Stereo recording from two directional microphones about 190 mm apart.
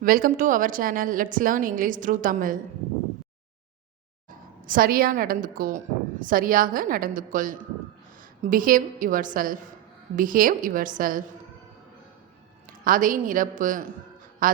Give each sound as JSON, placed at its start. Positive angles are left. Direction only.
{"t": 0.0, "sound": "a woman's voice", "side_deg": -50}
{"t": 4.3, "sound": "a woman's voice", "side_deg": -45}
{"t": 12.8, "sound": "a woman's voice", "side_deg": -45}